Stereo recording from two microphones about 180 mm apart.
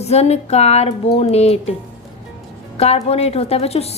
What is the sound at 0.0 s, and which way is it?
A woman's voice, 35° left (ahead or behind).